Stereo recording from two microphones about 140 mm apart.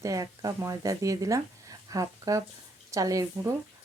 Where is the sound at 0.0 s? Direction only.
20° right (ahead or behind).